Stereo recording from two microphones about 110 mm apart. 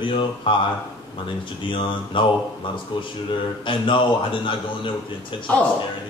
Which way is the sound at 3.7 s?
50° left (ahead or behind).